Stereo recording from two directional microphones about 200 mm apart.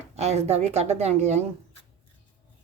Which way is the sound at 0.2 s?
30° right (ahead or behind).